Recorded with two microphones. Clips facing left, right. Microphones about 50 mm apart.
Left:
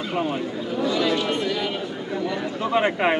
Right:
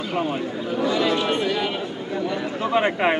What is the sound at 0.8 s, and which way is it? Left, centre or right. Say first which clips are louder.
Speech: right 1 dB; right.